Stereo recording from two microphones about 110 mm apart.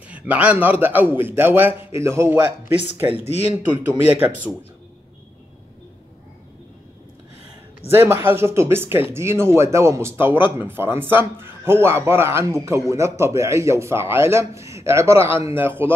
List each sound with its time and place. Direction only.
0.1 s a man's voice: 15° right (ahead or behind)
3.1 s speech: 70° left (ahead or behind)
4.1 s speech: 10° right (ahead or behind)
7.9 s a man's voice: 20° right (ahead or behind)